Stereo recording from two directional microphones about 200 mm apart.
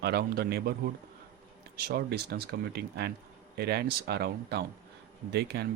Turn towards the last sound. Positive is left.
turn(degrees=-55)  # may be behind; listen again after turning